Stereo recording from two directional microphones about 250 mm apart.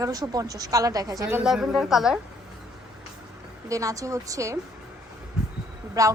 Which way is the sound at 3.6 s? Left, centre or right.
Centre.